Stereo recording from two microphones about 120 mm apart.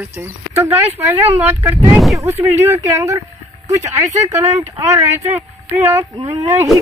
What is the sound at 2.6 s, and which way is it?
Speech, 25° right (ahead or behind).